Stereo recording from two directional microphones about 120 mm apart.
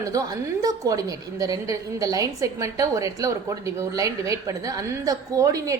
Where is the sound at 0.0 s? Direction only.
30° right (ahead or behind).